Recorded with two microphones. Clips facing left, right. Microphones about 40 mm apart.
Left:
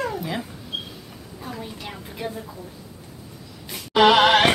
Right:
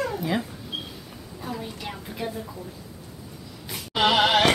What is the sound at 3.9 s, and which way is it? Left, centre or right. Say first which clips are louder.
Music: left 5 dB; left.